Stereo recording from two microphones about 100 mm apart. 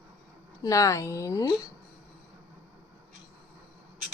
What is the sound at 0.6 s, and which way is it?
Speech, 35° left (ahead or behind).